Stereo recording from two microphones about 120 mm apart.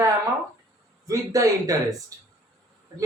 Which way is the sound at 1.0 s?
30° right (ahead or behind).